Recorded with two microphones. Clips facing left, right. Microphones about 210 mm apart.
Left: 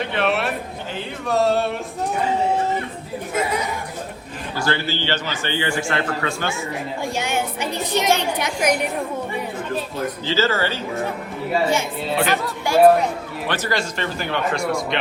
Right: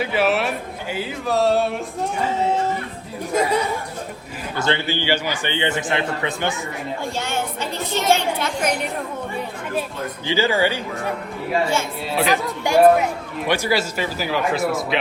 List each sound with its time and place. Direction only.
0.0 s a man's voice: 5° right (ahead or behind)
4.5 s a man's voice: 20° right (ahead or behind)
7.0 s a woman's voice: 15° left (ahead or behind)
10.2 s speech: 15° right (ahead or behind)
12.1 s speech: centre (ahead or behind)
12.4 s speech: 15° right (ahead or behind)